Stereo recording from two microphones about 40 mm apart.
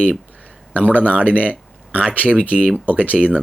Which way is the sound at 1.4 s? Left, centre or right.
Right.